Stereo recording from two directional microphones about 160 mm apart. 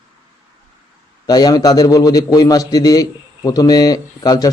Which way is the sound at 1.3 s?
25° left (ahead or behind).